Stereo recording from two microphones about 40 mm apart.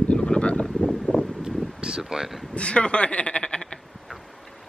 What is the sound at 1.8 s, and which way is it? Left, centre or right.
Speech, centre.